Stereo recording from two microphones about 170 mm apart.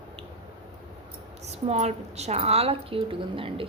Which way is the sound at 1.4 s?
40° right (ahead or behind).